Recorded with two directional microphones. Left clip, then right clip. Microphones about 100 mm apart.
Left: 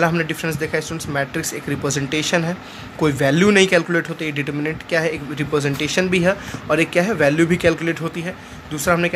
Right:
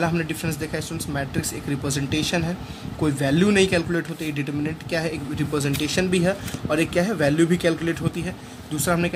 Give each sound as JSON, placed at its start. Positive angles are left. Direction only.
{"t": 0.0, "sound": "speech", "side_deg": 35}